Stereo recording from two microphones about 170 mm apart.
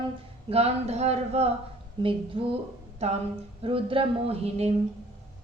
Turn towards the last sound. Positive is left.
turn(degrees=-40)  # may be behind; listen again after turning